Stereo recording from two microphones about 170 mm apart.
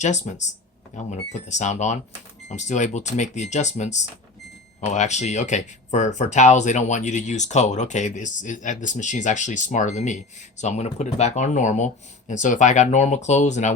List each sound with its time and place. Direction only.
0.0 s speech: 45° left (ahead or behind)